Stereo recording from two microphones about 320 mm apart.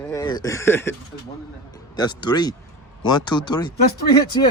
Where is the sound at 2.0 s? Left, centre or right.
Centre.